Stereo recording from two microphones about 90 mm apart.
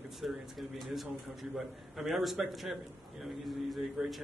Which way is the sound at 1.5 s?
5° right (ahead or behind).